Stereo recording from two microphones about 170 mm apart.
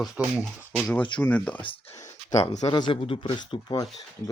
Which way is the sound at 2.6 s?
25° left (ahead or behind).